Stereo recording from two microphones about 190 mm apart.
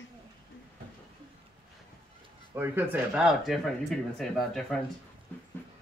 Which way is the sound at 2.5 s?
10° right (ahead or behind).